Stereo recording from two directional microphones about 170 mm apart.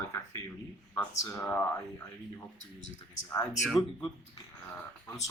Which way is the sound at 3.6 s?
Centre (ahead or behind).